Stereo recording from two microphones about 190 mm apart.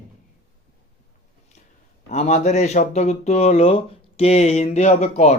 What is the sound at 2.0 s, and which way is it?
Speech, 35° left (ahead or behind).